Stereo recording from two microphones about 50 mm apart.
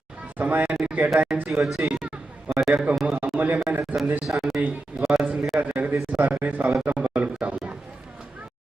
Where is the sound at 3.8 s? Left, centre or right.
Centre.